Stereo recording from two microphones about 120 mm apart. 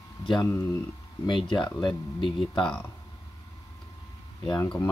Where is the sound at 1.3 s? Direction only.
40° left (ahead or behind).